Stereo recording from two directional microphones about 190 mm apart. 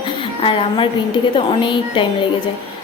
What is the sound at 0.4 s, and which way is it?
A woman's voice, 25° left (ahead or behind).